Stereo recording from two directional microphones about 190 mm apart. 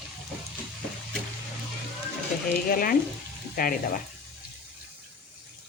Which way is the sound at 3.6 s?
50° left (ahead or behind).